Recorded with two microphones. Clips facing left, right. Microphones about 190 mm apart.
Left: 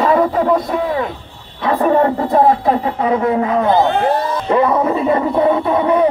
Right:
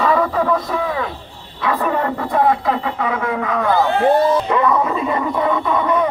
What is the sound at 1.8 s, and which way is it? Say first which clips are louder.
Speech: left 6 dB; 35° left (ahead or behind).